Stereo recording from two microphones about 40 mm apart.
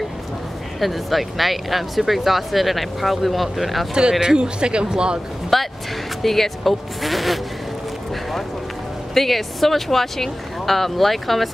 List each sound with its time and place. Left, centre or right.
0.7 s speech: centre
4.1 s speech: centre
5.5 s speech: centre
9.1 s speech: centre